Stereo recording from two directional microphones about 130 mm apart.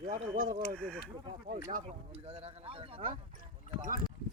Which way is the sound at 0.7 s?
10° left (ahead or behind).